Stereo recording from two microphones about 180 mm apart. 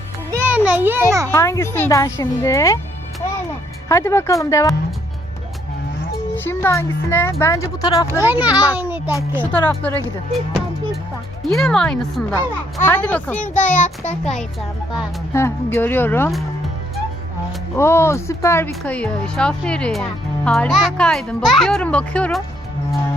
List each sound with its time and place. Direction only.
0.3 s music: 10° right (ahead or behind)
1.3 s speech: 15° left (ahead or behind)
3.8 s speech: 15° left (ahead or behind)
6.3 s speech: 10° left (ahead or behind)
8.2 s a child's voice: 10° right (ahead or behind)
9.4 s speech: 10° left (ahead or behind)
11.4 s speech: 5° left (ahead or behind)
13.8 s a child's voice: 40° left (ahead or behind)
15.3 s speech: 15° left (ahead or behind)
17.7 s speech: 15° left (ahead or behind)
18.7 s speech: 5° left (ahead or behind)